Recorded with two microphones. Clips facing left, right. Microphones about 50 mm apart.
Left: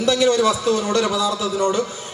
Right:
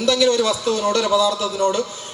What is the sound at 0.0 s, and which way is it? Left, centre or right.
A man's voice, left.